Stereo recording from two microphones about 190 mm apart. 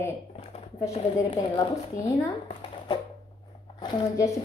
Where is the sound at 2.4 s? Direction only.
25° left (ahead or behind).